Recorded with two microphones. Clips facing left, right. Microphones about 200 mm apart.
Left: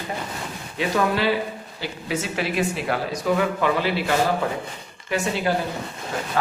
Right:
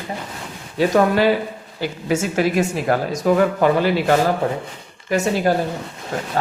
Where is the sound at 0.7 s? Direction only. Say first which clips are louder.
Right 6 dB; 45° right (ahead or behind).